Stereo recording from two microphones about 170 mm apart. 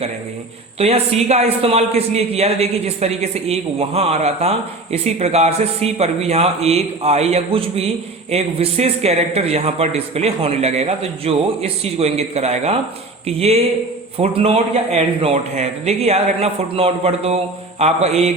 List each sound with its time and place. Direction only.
0.8 s a man's voice: 35° right (ahead or behind)